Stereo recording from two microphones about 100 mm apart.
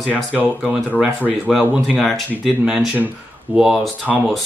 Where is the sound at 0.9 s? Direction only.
15° right (ahead or behind).